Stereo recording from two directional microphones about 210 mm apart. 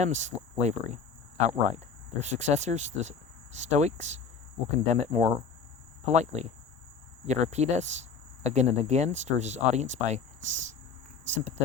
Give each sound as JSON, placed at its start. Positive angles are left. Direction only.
{"t": 0.0, "sound": "speech", "side_deg": -35}
{"t": 2.1, "sound": "speech", "side_deg": -35}